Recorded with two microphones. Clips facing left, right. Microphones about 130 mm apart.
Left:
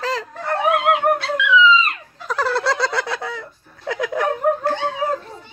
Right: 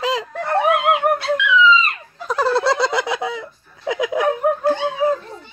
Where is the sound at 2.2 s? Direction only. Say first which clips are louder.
Right 3 dB; 15° right (ahead or behind).